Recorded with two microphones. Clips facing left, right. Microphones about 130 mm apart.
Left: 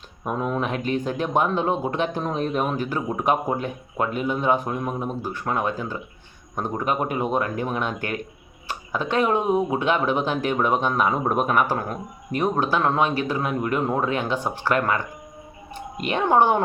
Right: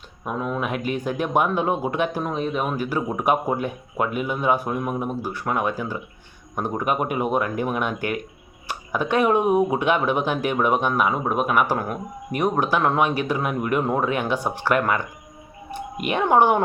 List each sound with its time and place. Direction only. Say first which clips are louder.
0.4 s speech: even; 5° right (ahead or behind)